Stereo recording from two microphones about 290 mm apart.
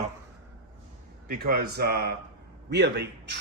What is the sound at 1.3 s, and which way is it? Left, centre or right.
Speech, right.